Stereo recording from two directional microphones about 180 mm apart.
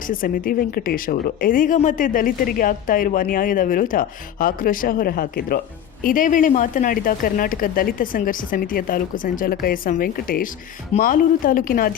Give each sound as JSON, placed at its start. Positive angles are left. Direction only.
{"t": 0.1, "sound": "a woman's voice", "side_deg": 50}